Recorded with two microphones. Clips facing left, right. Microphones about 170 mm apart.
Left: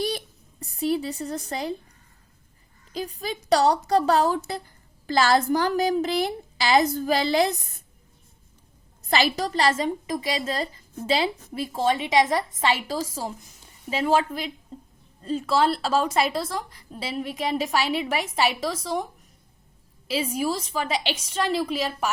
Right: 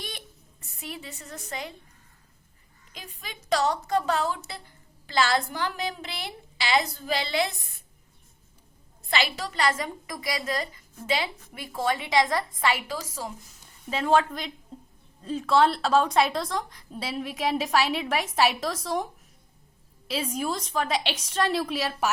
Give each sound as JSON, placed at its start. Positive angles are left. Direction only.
{"t": 0.6, "sound": "a woman's voice", "side_deg": 35}
{"t": 2.9, "sound": "a woman's voice", "side_deg": 35}
{"t": 9.0, "sound": "a woman's voice", "side_deg": 40}
{"t": 13.9, "sound": "a woman's voice", "side_deg": 5}
{"t": 20.1, "sound": "a woman's voice", "side_deg": 5}